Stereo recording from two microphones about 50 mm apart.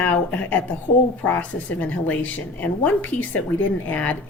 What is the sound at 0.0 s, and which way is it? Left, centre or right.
A woman's voice, left.